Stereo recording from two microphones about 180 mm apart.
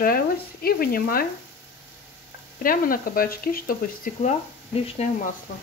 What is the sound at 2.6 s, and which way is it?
Speech, 50° left (ahead or behind).